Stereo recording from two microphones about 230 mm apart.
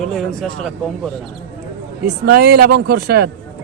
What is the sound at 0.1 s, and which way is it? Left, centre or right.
Speech, centre.